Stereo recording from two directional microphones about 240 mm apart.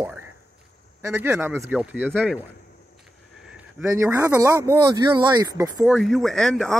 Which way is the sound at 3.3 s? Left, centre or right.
Centre.